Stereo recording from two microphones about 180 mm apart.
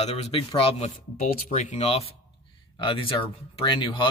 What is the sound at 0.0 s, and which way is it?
Speech, 35° left (ahead or behind).